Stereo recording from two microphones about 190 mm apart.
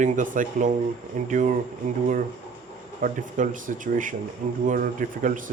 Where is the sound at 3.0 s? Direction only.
45° right (ahead or behind).